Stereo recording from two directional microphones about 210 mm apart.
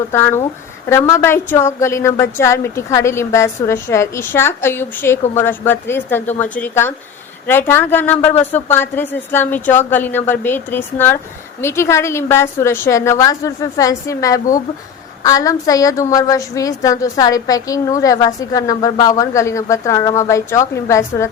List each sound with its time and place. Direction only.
0.1 s a woman's voice: 10° left (ahead or behind)